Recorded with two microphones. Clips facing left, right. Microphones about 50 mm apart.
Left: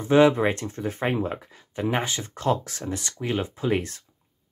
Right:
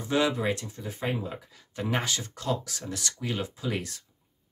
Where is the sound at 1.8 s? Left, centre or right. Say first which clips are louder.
Left 4 dB; left.